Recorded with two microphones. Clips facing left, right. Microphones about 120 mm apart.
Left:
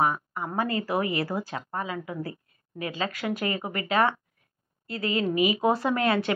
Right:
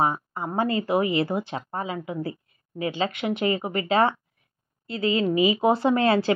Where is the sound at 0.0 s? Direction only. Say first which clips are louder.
Right 1 dB; 30° right (ahead or behind).